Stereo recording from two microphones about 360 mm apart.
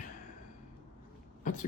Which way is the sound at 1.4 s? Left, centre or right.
Left.